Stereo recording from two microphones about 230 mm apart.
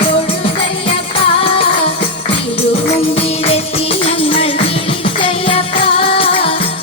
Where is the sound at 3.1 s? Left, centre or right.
Left.